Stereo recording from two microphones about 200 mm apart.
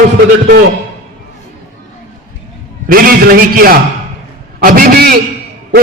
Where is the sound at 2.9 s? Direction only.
45° right (ahead or behind).